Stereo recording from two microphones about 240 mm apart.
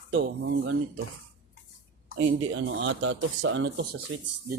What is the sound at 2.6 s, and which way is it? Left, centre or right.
Speech, right.